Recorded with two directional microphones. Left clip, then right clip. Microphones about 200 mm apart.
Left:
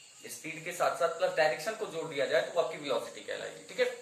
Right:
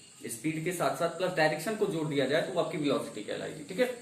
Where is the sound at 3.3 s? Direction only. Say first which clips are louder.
Right 1 dB; 10° left (ahead or behind).